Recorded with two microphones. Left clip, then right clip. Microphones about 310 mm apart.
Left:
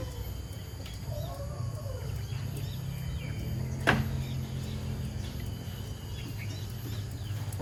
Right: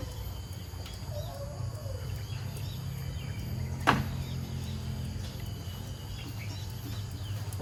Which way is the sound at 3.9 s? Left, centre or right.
Centre.